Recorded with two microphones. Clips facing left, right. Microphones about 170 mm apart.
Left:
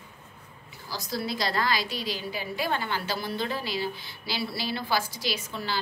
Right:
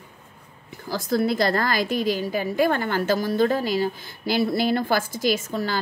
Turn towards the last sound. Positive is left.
turn(degrees=-45)  # may be behind; listen again after turning